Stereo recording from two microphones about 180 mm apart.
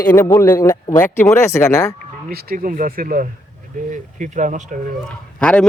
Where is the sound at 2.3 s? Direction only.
55° right (ahead or behind).